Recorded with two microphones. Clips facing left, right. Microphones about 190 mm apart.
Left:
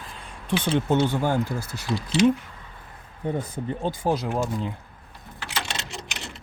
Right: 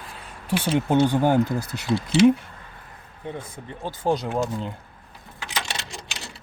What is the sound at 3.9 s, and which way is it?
Speech, 5° left (ahead or behind).